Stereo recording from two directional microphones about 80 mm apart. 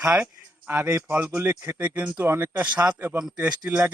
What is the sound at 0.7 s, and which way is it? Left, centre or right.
Speech, right.